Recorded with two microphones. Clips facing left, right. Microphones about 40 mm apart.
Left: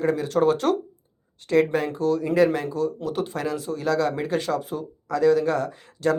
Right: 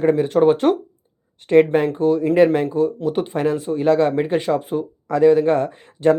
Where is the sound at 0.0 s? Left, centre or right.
Right.